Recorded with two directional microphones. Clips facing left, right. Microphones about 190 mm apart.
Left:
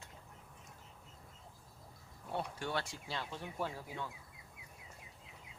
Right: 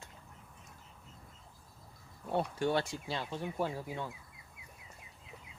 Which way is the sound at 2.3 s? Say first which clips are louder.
Right 7 dB; 25° right (ahead or behind).